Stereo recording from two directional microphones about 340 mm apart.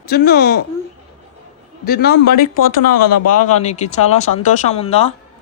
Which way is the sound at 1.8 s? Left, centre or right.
Left.